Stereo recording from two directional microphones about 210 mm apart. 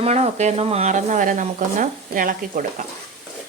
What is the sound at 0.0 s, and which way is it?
Speech, 30° right (ahead or behind).